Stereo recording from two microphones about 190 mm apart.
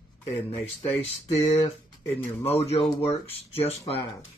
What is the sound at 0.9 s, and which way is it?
Speech, 30° left (ahead or behind).